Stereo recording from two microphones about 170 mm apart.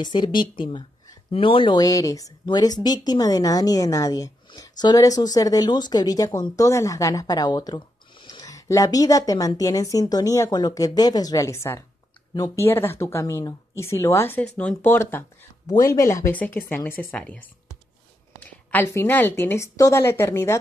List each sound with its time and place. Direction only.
0.0 s speech: 25° left (ahead or behind); by 17.4 s 10° left (ahead or behind)
18.4 s speech: 10° left (ahead or behind)